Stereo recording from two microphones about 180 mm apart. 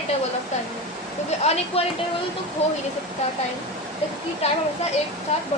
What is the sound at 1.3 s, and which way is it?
A woman's voice, 40° left (ahead or behind).